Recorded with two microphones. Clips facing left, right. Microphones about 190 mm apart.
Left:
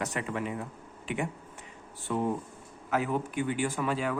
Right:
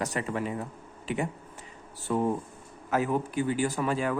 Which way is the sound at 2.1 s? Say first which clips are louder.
Right 3 dB; 40° right (ahead or behind).